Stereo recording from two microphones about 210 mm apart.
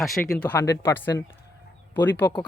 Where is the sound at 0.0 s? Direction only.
Centre (ahead or behind).